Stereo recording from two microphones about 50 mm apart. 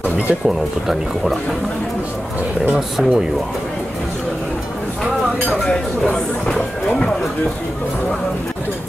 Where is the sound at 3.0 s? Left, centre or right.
Centre.